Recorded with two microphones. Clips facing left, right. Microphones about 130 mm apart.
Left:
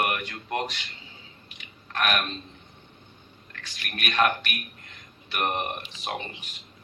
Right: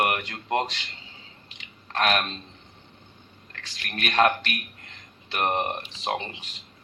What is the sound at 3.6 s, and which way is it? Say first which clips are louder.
A man's voice: right 2 dB; 30° right (ahead or behind).